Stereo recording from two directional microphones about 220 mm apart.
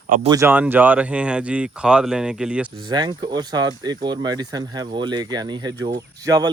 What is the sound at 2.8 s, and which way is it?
Speech, 20° right (ahead or behind).